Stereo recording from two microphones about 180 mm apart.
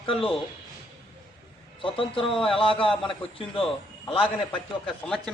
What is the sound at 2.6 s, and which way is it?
A man's voice, 30° left (ahead or behind).